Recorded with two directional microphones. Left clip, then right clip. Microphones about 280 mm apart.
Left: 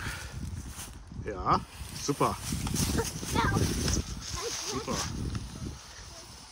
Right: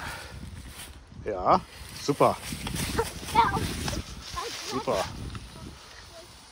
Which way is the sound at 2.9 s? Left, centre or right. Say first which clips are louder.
Right 10 dB; centre.